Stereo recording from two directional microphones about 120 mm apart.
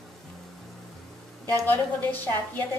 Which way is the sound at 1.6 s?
15° left (ahead or behind).